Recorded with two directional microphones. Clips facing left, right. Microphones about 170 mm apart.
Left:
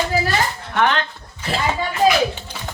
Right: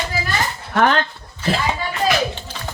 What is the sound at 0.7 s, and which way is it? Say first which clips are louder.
Speech: right 2 dB; 40° right (ahead or behind).